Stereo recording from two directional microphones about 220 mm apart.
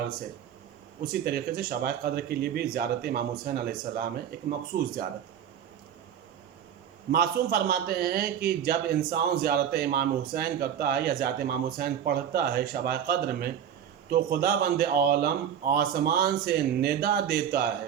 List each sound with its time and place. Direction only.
1.1 s a man's voice: 45° right (ahead or behind)
7.1 s a man's voice: 45° right (ahead or behind)